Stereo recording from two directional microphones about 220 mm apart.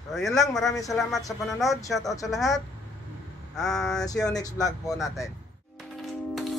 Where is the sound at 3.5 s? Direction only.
Centre (ahead or behind).